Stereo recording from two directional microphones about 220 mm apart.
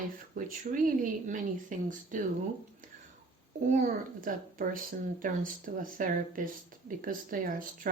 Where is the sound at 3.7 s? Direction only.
40° right (ahead or behind).